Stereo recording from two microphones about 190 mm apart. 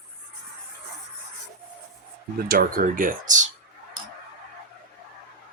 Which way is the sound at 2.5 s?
50° right (ahead or behind).